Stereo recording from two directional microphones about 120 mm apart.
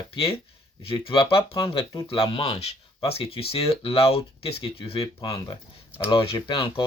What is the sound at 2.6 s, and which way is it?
Speech, 60° left (ahead or behind).